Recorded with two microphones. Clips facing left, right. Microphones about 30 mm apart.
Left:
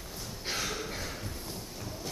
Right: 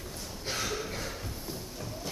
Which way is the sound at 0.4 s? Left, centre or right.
Centre.